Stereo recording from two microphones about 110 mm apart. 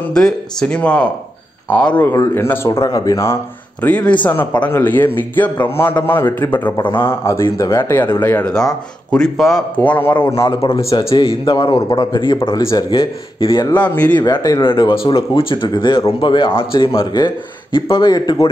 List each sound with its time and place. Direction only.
0.1 s a man's voice: 5° left (ahead or behind); by 3.3 s 30° left (ahead or behind)
3.8 s a man's voice: 15° left (ahead or behind)
9.8 s a man's voice: 15° left (ahead or behind)
11.1 s speech: 45° left (ahead or behind)
12.6 s a man's voice: 35° left (ahead or behind)
13.4 s a man's voice: 50° left (ahead or behind)
14.6 s speech: 50° left (ahead or behind)
18.0 s a man's voice: 40° left (ahead or behind)